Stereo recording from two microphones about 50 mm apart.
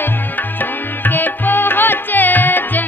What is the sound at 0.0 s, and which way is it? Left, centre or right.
Music, left.